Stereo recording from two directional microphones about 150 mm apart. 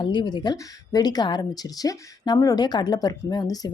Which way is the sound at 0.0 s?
30° left (ahead or behind).